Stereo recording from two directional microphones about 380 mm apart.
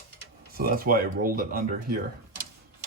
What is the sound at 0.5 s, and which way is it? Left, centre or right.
Speech, right.